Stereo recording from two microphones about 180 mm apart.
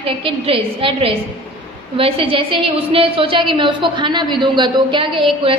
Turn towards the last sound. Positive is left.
turn(degrees=-30)  # may be behind; listen again after turning